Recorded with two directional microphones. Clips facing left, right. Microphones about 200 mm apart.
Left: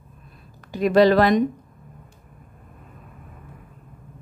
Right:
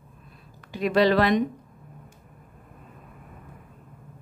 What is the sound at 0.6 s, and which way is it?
Speech, 45° left (ahead or behind).